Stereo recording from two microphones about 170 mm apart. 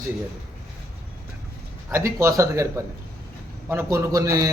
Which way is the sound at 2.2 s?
15° right (ahead or behind).